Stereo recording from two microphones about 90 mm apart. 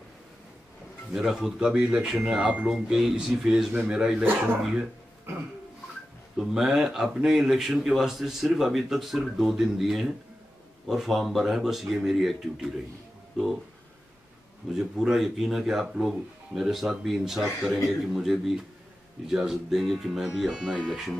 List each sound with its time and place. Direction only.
1.1 s speech: 5° right (ahead or behind)
4.2 s speech: 20° right (ahead or behind)
6.3 s speech: 5° right (ahead or behind)
14.7 s speech: 5° right (ahead or behind)